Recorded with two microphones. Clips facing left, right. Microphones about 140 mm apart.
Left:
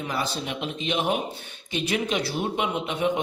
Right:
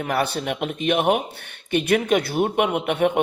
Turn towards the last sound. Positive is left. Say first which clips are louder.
# right 5 dB
turn(degrees=-60)  # may be behind; listen again after turning